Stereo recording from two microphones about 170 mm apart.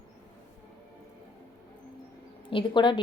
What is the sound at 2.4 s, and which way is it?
Speech, 30° left (ahead or behind).